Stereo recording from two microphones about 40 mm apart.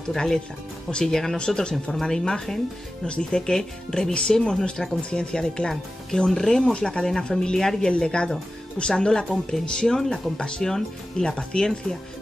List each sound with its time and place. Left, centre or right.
0.1 s speech: centre
3.1 s speech: left
7.9 s speech: left